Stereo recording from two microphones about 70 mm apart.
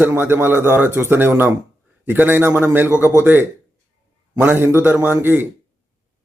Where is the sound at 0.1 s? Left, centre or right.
Right.